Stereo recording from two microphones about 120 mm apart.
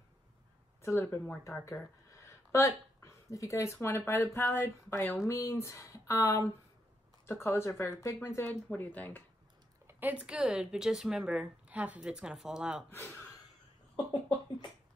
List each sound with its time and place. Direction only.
0.8 s speech: 20° left (ahead or behind)
9.8 s speech: 15° right (ahead or behind)
12.9 s speech: 20° left (ahead or behind)